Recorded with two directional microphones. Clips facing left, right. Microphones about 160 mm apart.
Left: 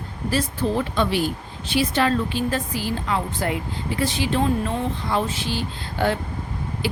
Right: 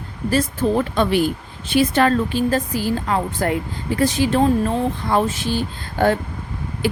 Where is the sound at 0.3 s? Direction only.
45° right (ahead or behind).